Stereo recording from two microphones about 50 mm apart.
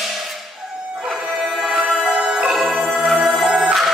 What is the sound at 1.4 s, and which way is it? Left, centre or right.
Music, centre.